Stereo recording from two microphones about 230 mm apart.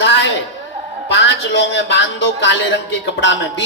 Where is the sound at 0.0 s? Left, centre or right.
Left.